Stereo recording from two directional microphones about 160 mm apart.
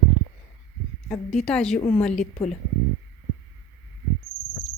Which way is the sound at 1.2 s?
5° left (ahead or behind).